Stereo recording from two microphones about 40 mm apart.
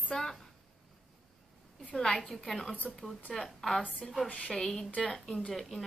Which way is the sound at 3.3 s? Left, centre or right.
Centre.